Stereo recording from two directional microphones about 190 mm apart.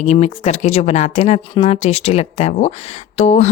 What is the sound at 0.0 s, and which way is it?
Speech, 35° left (ahead or behind).